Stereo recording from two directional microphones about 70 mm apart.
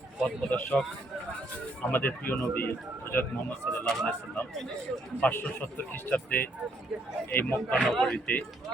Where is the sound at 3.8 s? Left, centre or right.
Centre.